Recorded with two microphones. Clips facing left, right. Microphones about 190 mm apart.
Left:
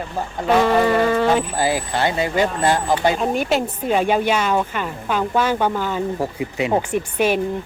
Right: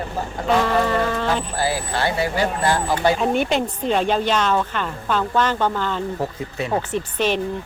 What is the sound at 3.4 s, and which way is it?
A woman's voice, 5° left (ahead or behind).